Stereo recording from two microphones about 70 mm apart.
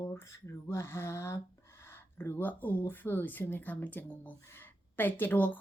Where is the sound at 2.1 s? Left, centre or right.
Left.